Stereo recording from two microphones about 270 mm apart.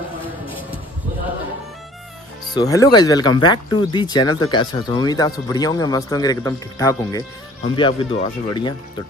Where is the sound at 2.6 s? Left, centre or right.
Centre.